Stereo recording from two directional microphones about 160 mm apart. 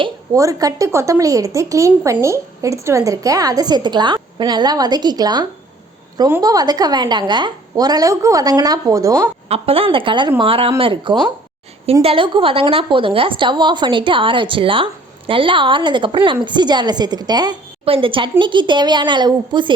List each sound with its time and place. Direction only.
0.3 s a woman's voice: 20° right (ahead or behind)
9.5 s a woman's voice: 35° right (ahead or behind)